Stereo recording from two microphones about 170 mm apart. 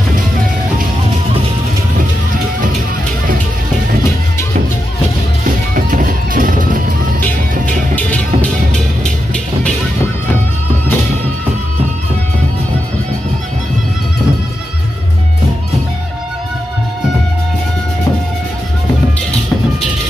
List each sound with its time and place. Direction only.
5.8 s music: 55° right (ahead or behind)
7.9 s music: 10° left (ahead or behind)